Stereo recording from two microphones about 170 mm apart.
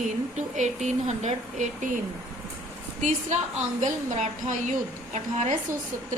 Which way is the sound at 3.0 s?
45° right (ahead or behind).